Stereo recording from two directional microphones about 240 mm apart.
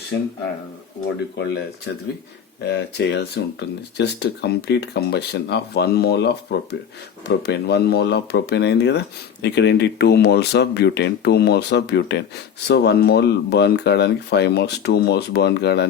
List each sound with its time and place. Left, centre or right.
2.6 s speech: left